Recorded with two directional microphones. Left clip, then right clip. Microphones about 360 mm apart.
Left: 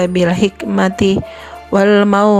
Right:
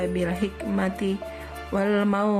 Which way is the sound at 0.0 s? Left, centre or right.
Left.